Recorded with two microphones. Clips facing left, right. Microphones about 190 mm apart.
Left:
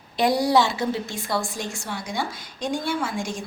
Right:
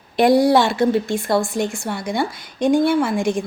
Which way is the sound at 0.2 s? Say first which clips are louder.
Right 6 dB; 55° right (ahead or behind).